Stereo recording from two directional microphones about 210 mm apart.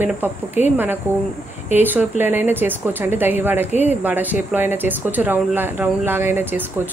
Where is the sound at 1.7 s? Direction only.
10° right (ahead or behind).